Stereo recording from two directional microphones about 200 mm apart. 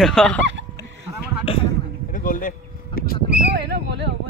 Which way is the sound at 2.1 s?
45° left (ahead or behind).